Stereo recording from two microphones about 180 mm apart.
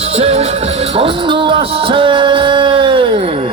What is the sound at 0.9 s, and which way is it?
Speech, 30° right (ahead or behind).